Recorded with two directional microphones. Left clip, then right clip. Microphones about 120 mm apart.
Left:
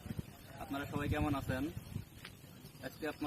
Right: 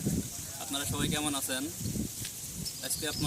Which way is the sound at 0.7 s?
5° right (ahead or behind).